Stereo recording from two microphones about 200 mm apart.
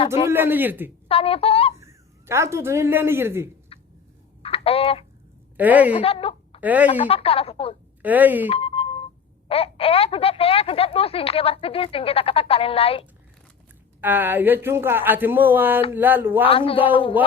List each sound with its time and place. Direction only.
0.3 s speech: 10° right (ahead or behind)
1.0 s speech: 30° left (ahead or behind)
1.8 s speech: 15° right (ahead or behind)
3.7 s finger snapping: 30° left (ahead or behind)
4.4 s a sound: 30° left (ahead or behind)
5.5 s speech: 10° right (ahead or behind)
5.9 s speech: 30° left (ahead or behind)
6.6 s speech: 10° right (ahead or behind)
7.1 s speech: 30° left (ahead or behind)
8.0 s speech: 10° right (ahead or behind)
8.4 s a sound: 30° left (ahead or behind)
9.5 s speech: 30° left (ahead or behind)
14.0 s speech: 10° right (ahead or behind)
16.5 s speech: 25° left (ahead or behind)